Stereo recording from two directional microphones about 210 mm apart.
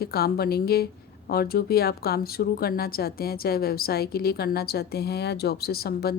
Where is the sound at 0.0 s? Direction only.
50° left (ahead or behind).